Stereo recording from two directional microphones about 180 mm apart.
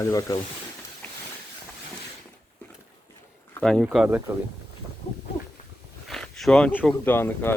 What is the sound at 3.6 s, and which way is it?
Speech, 5° left (ahead or behind).